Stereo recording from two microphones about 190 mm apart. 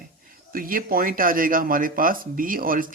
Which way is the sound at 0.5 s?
50° right (ahead or behind).